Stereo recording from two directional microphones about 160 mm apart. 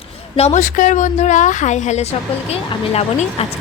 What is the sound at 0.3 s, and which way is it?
A woman's voice, 45° left (ahead or behind).